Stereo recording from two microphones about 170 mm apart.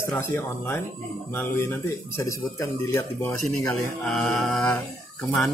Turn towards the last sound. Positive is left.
turn(degrees=10)  # may be behind; listen again after turning